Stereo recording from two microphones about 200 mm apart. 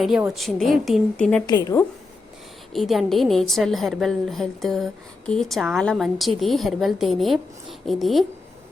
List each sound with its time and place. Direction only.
0.0 s a woman's voice: 5° right (ahead or behind)
1.5 s a woman's voice: 20° left (ahead or behind)
2.7 s a woman's voice: centre (ahead or behind)